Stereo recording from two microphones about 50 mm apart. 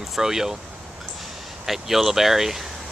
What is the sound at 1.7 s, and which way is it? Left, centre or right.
Speech, centre.